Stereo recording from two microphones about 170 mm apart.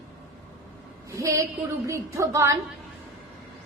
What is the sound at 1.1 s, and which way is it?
A woman's voice, 20° right (ahead or behind).